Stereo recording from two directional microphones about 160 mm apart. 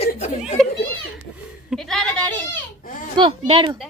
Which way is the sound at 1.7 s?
Centre (ahead or behind).